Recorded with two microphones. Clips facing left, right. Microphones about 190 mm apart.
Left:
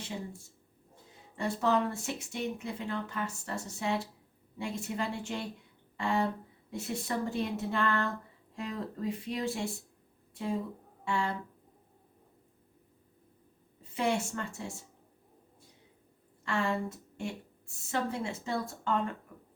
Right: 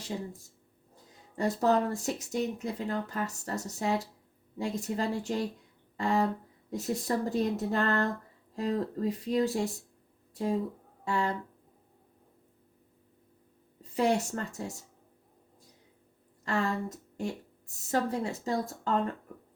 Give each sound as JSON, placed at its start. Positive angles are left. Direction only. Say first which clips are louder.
{"t": 1.4, "sound": "speech", "louder": "right 3 dB", "side_deg": -40}
{"t": 11.0, "sound": "speech", "louder": "right 2 dB", "side_deg": -40}
{"t": 13.9, "sound": "speech", "louder": "right 4 dB", "side_deg": -40}
{"t": 16.4, "sound": "a woman's voice", "louder": "right 1 dB", "side_deg": -40}